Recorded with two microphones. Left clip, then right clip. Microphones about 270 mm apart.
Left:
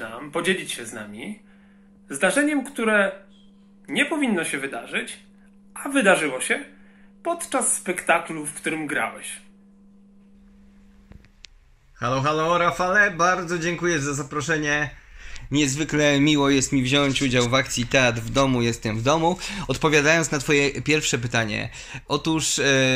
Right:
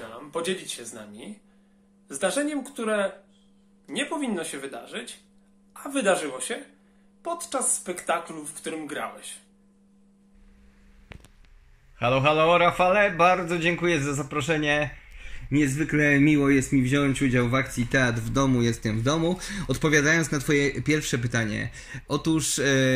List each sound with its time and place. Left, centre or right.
0.0 s a man's voice: centre
12.0 s a man's voice: centre
15.8 s speech: left
16.5 s a man's voice: centre